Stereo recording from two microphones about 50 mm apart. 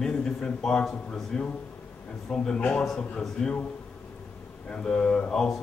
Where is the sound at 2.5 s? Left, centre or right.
Left.